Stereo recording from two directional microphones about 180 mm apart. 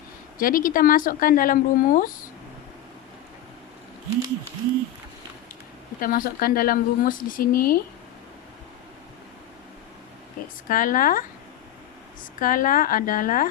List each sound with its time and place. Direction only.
0.3 s speech: 50° left (ahead or behind)
6.0 s speech: 50° left (ahead or behind)
10.7 s speech: 50° left (ahead or behind)
12.4 s speech: 50° left (ahead or behind)